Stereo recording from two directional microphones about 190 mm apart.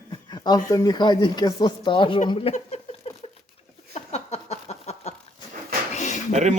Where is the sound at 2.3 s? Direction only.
30° left (ahead or behind).